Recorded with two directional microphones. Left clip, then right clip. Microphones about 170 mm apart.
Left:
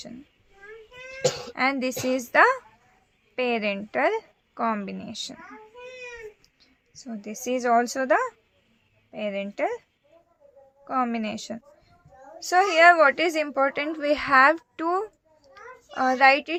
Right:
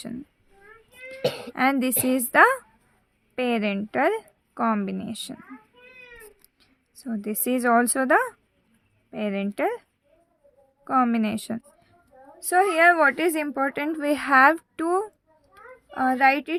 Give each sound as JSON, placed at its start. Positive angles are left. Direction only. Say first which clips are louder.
{"t": 1.2, "sound": "cough", "louder": "left 1 dB", "side_deg": -15}
{"t": 1.5, "sound": "speech", "louder": "right 2 dB", "side_deg": -40}
{"t": 6.4, "sound": "speech", "louder": "left 2 dB", "side_deg": -40}
{"t": 10.8, "sound": "speech", "louder": "right 4 dB", "side_deg": -45}
{"t": 12.5, "sound": "a child's voice", "louder": "left 1 dB", "side_deg": -25}